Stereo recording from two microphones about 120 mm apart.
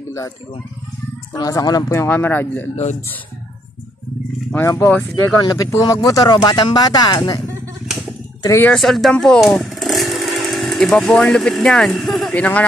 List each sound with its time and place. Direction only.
1.3 s speech: 30° left (ahead or behind); by 2.7 s 15° left (ahead or behind)
2.7 s speech: 65° left (ahead or behind)
4.6 s speech: 25° left (ahead or behind)
8.7 s speech: centre (ahead or behind)
12.4 s speech: 10° left (ahead or behind)